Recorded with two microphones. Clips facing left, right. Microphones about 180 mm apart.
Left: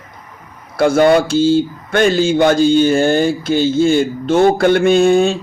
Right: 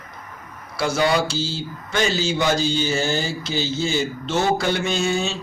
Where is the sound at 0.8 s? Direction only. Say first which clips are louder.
Left 9 dB; 55° left (ahead or behind).